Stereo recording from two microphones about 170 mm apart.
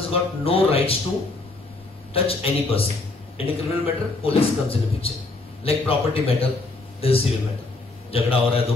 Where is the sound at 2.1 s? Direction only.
35° left (ahead or behind).